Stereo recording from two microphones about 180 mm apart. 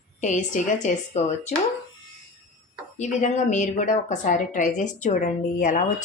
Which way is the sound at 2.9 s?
45° left (ahead or behind).